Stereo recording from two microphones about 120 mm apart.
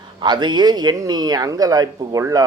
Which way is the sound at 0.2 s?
40° right (ahead or behind).